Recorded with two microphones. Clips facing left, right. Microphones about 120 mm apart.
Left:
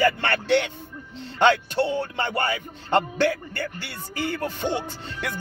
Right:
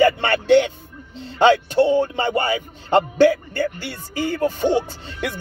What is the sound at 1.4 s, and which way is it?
Speech, 15° right (ahead or behind).